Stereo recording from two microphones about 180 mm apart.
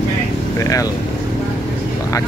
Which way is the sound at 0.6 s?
20° left (ahead or behind).